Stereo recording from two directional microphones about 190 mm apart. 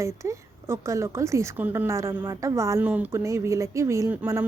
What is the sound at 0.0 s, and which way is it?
A woman's voice, 15° right (ahead or behind).